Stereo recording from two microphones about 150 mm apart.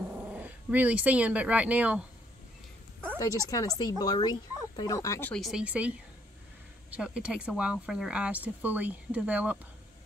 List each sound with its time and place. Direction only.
0.1 s speech: 10° right (ahead or behind)
3.2 s speech: 20° left (ahead or behind)
5.3 s speech: centre (ahead or behind)